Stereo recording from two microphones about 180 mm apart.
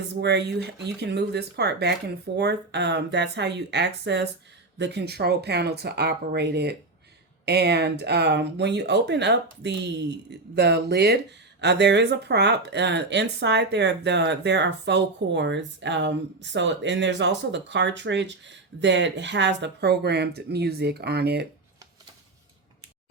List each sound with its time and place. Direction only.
0.1 s speech: 70° right (ahead or behind)